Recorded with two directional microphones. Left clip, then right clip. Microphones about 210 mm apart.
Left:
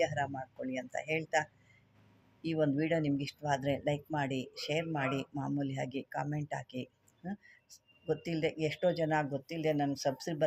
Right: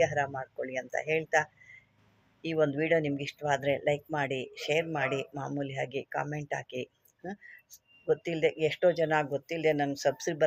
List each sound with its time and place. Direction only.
0.0 s speech: centre (ahead or behind)